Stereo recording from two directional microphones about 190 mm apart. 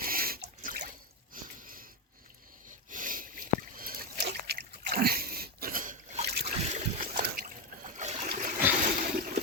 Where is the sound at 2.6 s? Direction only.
45° right (ahead or behind).